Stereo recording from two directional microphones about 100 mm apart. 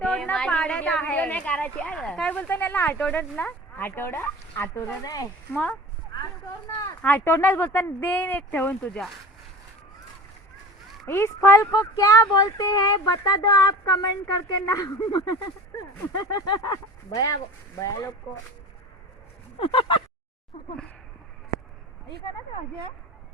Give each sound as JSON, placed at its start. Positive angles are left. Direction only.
{"t": 0.0, "sound": "a sound", "side_deg": 10}
{"t": 1.1, "sound": "speech", "side_deg": 15}
{"t": 4.8, "sound": "speech", "side_deg": 35}
{"t": 5.5, "sound": "speech", "side_deg": 20}
{"t": 7.0, "sound": "speech", "side_deg": 20}
{"t": 11.0, "sound": "speech", "side_deg": 25}
{"t": 19.5, "sound": "a sound", "side_deg": 60}